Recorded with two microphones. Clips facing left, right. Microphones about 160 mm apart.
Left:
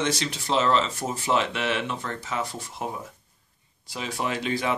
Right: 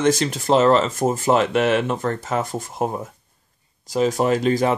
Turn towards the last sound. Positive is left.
turn(degrees=-40)  # may be behind; listen again after turning